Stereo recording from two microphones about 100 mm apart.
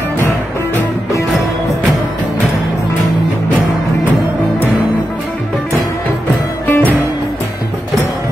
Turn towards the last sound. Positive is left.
turn(degrees=20)  # may be behind; listen again after turning